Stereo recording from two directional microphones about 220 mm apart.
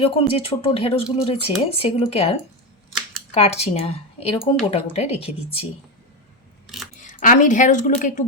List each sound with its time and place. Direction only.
0.0 s speech: 25° left (ahead or behind)
3.3 s speech: 30° left (ahead or behind)
6.9 s speech: 35° left (ahead or behind)